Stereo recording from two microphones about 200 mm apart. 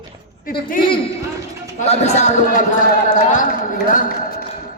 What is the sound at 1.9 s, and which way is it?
A man's voice, 35° left (ahead or behind).